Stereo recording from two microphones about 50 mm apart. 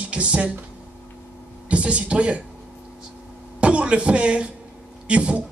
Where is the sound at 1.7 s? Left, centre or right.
Right.